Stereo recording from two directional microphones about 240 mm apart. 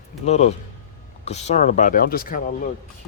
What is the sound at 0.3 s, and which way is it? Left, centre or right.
Speech, left.